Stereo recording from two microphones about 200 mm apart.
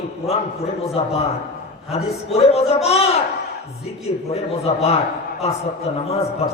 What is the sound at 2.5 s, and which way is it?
Speech, 30° left (ahead or behind).